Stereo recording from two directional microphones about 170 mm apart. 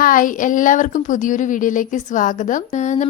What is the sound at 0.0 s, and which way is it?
A woman's voice, 50° left (ahead or behind).